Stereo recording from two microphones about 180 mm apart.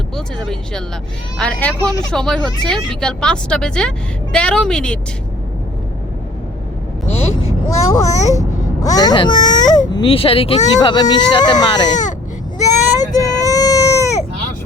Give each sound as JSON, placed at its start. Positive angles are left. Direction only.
{"t": 0.3, "sound": "speech", "side_deg": 5}
{"t": 7.1, "sound": "vehicle", "side_deg": 35}
{"t": 7.9, "sound": "a child's voice", "side_deg": 20}
{"t": 13.0, "sound": "baby cry", "side_deg": 20}